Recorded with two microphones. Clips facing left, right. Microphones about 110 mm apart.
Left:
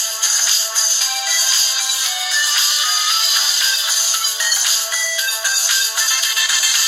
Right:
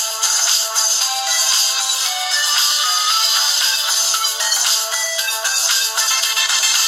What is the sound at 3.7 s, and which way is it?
Music, 55° right (ahead or behind).